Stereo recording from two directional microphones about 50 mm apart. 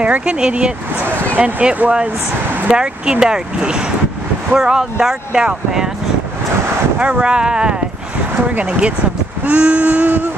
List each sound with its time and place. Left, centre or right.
0.2 s wail: right
2.7 s speech: centre
7.0 s speech: right
8.5 s wail: right